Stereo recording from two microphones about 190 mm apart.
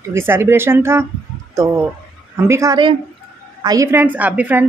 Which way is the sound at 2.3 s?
15° right (ahead or behind).